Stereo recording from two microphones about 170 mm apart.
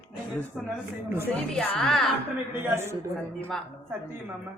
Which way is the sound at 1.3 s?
5° left (ahead or behind).